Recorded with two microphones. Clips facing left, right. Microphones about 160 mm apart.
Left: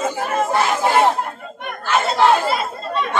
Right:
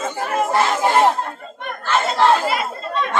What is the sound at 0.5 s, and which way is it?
Chatter, 5° left (ahead or behind).